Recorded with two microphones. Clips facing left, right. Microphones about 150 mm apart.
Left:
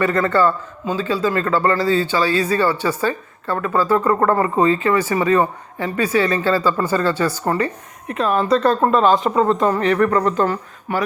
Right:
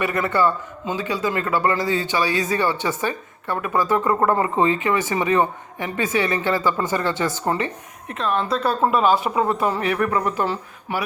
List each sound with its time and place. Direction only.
0.0 s a man's voice: 20° right (ahead or behind)
8.0 s speech: centre (ahead or behind)